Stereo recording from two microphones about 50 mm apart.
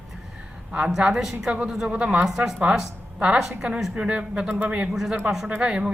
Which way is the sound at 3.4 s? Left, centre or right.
Centre.